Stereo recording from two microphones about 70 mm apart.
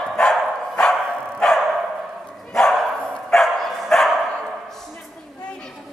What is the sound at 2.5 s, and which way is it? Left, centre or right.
Dog, centre.